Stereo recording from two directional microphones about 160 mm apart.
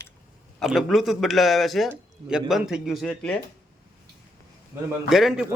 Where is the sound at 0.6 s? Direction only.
Centre (ahead or behind).